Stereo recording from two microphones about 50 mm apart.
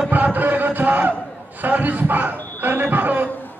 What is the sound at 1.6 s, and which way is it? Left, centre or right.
Crowd, right.